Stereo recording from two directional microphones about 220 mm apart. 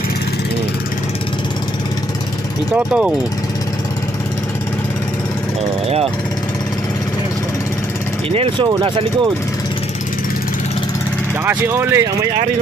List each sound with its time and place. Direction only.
2.7 s speech: 5° right (ahead or behind)
8.3 s speech: 25° right (ahead or behind)
11.4 s speech: 10° right (ahead or behind)